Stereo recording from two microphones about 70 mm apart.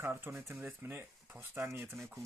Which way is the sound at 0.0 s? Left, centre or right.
Right.